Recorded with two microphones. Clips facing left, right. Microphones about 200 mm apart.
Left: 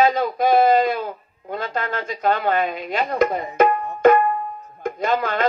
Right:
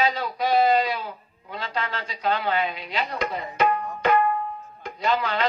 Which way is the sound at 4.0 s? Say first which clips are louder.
Left 7 dB; 50° left (ahead or behind).